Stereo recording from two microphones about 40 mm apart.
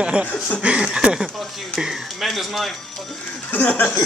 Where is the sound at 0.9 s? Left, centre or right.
Right.